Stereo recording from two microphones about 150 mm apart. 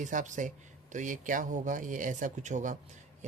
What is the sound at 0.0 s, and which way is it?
Speech, 55° right (ahead or behind).